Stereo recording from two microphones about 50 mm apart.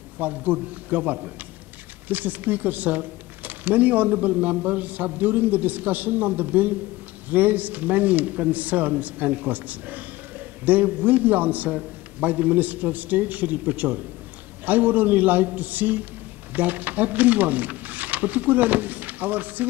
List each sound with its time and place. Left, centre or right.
0.2 s speech: right